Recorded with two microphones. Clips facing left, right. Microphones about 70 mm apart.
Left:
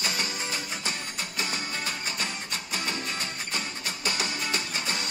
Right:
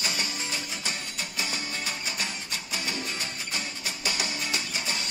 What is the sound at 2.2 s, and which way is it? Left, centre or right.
Music, left.